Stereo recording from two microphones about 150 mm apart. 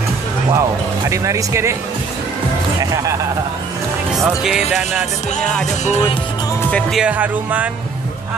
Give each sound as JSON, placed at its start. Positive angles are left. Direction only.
{"t": 0.5, "sound": "music", "side_deg": -20}
{"t": 4.3, "sound": "speech", "side_deg": -5}
{"t": 6.7, "sound": "speech", "side_deg": 0}